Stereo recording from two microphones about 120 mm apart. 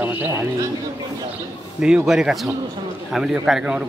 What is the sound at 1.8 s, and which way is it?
A man's voice, 5° right (ahead or behind).